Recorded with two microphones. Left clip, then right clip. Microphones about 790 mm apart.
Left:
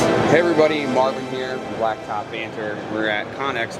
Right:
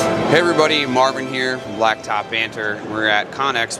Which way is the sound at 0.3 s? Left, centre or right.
Centre.